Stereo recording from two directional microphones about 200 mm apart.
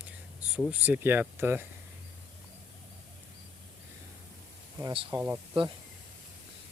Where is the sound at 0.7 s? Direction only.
10° right (ahead or behind).